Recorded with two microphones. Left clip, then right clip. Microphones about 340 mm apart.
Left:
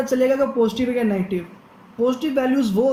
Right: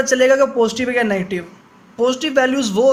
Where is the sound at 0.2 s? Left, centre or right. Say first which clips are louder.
Right 5 dB; right.